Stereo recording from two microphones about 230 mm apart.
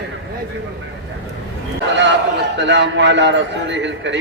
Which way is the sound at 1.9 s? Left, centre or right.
Right.